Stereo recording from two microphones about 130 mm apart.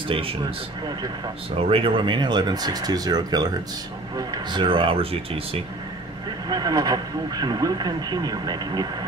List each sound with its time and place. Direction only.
0.1 s speech: 45° right (ahead or behind)
1.6 s speech: 45° right (ahead or behind)
6.5 s speech: 30° right (ahead or behind)